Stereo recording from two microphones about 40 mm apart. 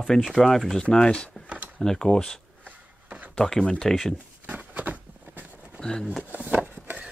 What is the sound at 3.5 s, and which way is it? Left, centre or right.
Speech, centre.